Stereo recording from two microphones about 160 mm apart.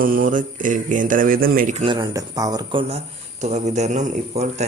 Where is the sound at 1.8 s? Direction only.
30° right (ahead or behind).